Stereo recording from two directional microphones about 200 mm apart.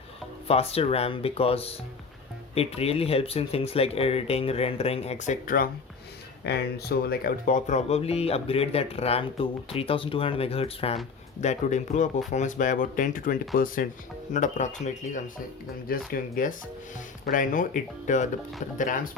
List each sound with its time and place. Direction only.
0.4 s speech: 30° left (ahead or behind)
6.4 s speech: 55° left (ahead or behind); by 18.3 s 40° left (ahead or behind)